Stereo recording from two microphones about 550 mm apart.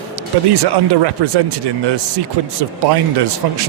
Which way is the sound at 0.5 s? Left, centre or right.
Right.